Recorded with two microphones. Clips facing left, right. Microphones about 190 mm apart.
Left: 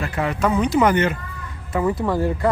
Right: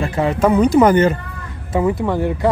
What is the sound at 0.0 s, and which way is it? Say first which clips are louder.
Speech: right 5 dB; 30° right (ahead or behind).